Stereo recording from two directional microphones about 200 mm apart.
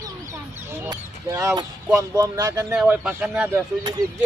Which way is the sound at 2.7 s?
5° right (ahead or behind).